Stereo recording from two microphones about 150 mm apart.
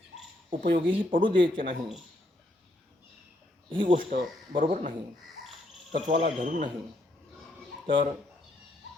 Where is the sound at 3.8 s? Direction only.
65° right (ahead or behind).